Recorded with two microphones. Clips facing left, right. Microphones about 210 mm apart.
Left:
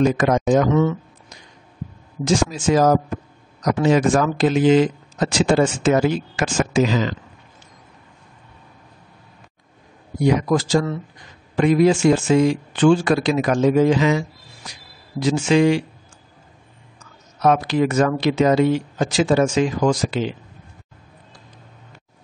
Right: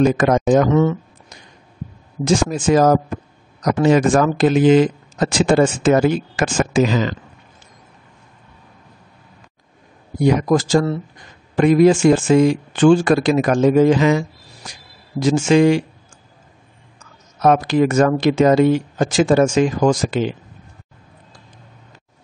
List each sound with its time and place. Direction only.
0.0 s speech: 55° right (ahead or behind)
10.2 s speech: 45° right (ahead or behind)
17.0 s speech: 45° right (ahead or behind)